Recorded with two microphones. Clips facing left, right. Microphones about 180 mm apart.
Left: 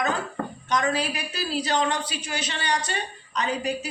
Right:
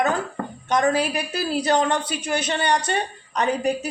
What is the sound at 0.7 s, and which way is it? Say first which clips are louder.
A woman's voice: right 5 dB; 50° right (ahead or behind).